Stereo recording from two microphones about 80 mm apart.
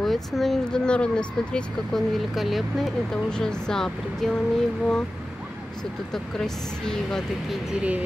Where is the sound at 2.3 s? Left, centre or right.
Centre.